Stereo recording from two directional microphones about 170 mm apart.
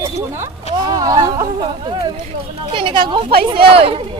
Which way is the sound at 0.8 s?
25° right (ahead or behind).